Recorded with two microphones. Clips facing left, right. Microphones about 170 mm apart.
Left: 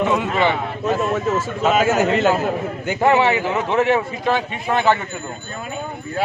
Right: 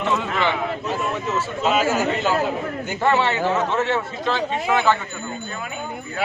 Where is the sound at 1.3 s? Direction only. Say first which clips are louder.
Left 1 dB; 50° left (ahead or behind).